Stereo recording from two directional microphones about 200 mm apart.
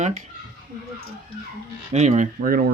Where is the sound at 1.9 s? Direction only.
35° right (ahead or behind).